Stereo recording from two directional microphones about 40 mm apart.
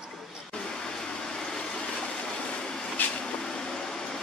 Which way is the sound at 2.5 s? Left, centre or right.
Left.